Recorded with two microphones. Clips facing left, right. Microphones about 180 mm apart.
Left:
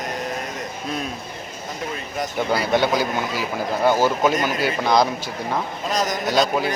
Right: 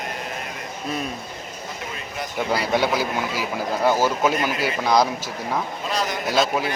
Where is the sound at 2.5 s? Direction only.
Centre (ahead or behind).